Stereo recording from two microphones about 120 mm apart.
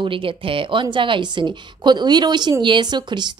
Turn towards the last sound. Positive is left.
turn(degrees=-40)  # may be behind; listen again after turning